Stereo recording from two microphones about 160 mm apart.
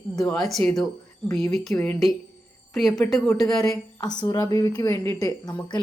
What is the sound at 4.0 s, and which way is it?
Speech, 25° left (ahead or behind).